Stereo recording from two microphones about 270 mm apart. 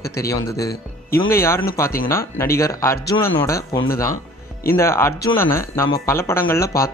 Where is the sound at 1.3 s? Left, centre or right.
Centre.